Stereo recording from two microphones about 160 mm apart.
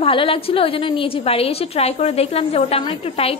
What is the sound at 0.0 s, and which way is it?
A woman's voice, 35° left (ahead or behind).